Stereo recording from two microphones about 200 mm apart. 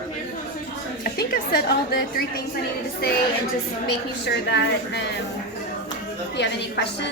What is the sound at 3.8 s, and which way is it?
A woman's voice, 55° left (ahead or behind).